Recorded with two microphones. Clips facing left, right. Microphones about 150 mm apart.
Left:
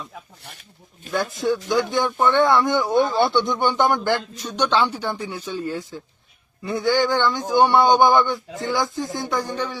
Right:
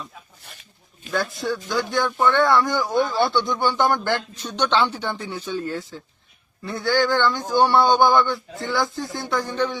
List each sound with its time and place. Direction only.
1.1 s speech: 15° left (ahead or behind)